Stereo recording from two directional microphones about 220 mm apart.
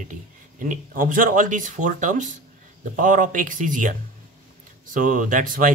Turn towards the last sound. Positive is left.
turn(degrees=-40)  # may be behind; listen again after turning